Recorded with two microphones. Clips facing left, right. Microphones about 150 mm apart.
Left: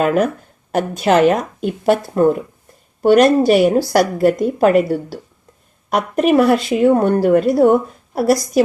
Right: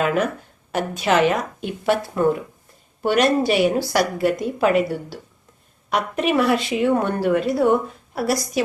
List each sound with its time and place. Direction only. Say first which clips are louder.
0.0 s a woman's voice: left 5 dB; 45° left (ahead or behind)
3.0 s a woman's voice: left 7 dB; 45° left (ahead or behind)